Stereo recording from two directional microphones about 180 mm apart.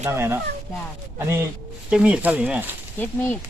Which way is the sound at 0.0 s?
15° right (ahead or behind).